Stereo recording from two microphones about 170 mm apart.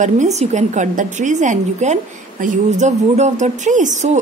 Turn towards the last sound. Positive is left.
turn(degrees=-45)  # may be behind; listen again after turning